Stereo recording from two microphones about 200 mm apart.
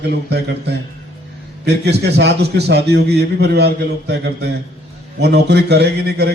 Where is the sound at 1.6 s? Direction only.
55° right (ahead or behind).